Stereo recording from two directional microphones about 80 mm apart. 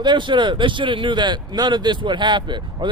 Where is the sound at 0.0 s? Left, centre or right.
Right.